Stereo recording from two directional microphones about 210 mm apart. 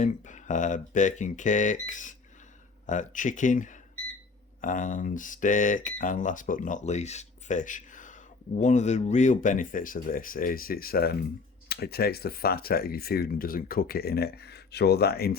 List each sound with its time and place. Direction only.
0.0 s speech: 35° left (ahead or behind)